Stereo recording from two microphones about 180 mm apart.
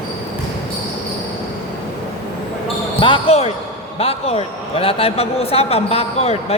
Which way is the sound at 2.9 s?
30° left (ahead or behind).